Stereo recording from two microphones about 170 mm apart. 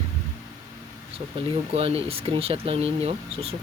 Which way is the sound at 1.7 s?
35° right (ahead or behind).